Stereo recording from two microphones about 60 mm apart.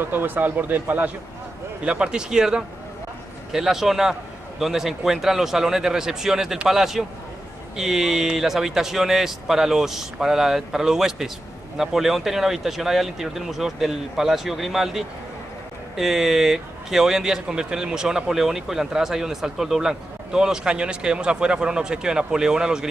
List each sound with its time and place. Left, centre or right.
0.1 s speech: right
1.9 s speech: centre